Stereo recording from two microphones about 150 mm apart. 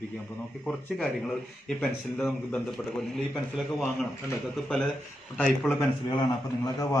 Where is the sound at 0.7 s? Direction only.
5° left (ahead or behind).